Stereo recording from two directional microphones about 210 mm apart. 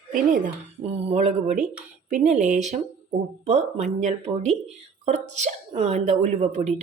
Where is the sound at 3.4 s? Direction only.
30° right (ahead or behind).